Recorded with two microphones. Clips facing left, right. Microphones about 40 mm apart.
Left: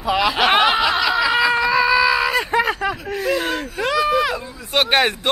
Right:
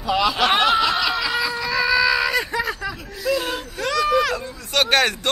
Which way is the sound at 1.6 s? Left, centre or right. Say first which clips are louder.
Left 4 dB; left.